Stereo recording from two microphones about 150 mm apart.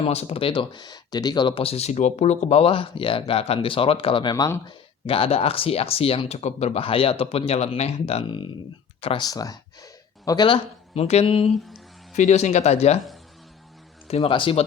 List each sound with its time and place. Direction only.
0.0 s speech: 45° left (ahead or behind)
9.2 s speech: 25° left (ahead or behind); by 11.5 s 40° left (ahead or behind)
12.1 s speech: 50° left (ahead or behind)
14.1 s speech: 40° left (ahead or behind)